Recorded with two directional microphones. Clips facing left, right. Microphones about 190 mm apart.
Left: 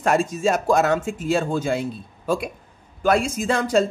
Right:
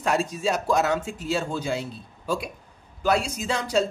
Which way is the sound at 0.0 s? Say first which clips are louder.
Left 4 dB; 50° left (ahead or behind).